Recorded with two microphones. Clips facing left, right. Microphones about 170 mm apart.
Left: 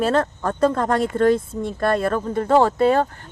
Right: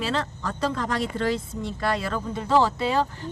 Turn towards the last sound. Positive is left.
turn(degrees=50)  # may be behind; listen again after turning